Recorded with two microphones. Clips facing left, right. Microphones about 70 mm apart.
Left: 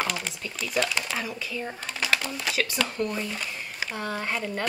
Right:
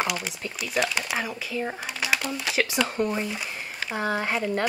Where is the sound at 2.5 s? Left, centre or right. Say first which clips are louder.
Right 4 dB; centre.